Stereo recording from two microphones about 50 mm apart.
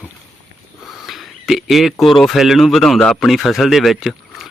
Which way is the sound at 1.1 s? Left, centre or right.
Centre.